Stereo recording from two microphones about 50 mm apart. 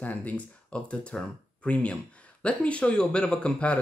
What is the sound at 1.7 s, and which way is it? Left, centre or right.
Speech, left.